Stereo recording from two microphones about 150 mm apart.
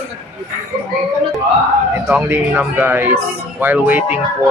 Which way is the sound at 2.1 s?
10° right (ahead or behind).